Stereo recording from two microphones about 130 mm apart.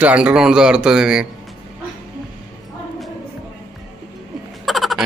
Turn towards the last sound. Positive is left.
turn(degrees=0)  # may be behind; listen again after turning